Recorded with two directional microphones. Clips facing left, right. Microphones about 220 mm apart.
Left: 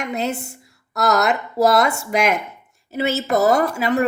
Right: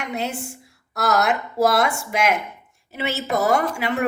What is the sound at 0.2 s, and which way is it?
A woman's voice, 40° left (ahead or behind).